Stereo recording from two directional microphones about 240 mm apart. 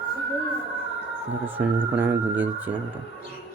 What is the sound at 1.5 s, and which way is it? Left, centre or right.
Speech, centre.